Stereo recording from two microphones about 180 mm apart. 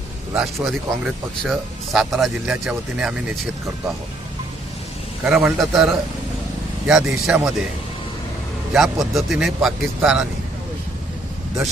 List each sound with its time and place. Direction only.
0.3 s speech: centre (ahead or behind)
5.2 s speech: 5° right (ahead or behind)
8.7 s speech: centre (ahead or behind)